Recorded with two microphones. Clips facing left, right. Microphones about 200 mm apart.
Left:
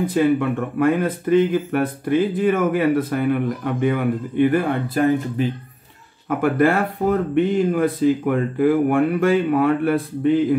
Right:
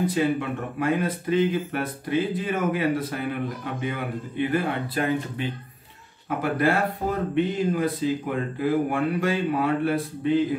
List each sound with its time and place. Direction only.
0.1 s speech: 55° left (ahead or behind)